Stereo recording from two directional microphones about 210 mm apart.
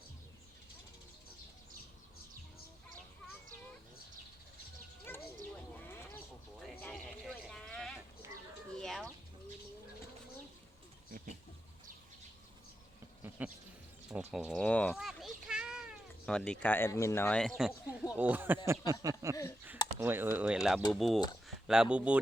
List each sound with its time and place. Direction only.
5.1 s bird: 10° left (ahead or behind)
5.8 s a sound: 10° left (ahead or behind)
8.7 s chicken: centre (ahead or behind)
13.4 s bird: 10° right (ahead or behind)
14.1 s speech: 5° right (ahead or behind)
14.9 s cat: 5° right (ahead or behind)
18.1 s speech: 10° right (ahead or behind)